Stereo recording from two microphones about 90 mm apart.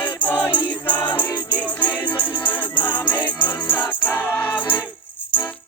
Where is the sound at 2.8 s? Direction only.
20° left (ahead or behind).